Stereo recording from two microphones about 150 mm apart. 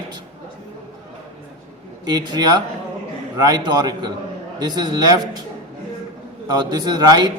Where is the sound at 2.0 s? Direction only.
30° right (ahead or behind).